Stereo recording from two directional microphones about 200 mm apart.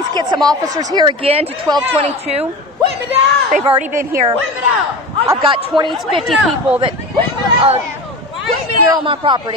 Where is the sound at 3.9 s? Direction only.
45° right (ahead or behind).